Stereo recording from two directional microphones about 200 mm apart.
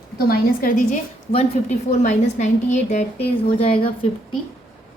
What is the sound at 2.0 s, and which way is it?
A woman's voice, 35° left (ahead or behind).